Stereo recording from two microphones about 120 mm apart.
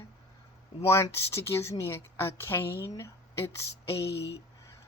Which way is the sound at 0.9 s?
25° left (ahead or behind).